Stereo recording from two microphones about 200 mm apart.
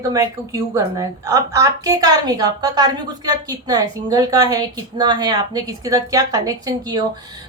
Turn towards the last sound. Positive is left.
turn(degrees=-20)  # may be behind; listen again after turning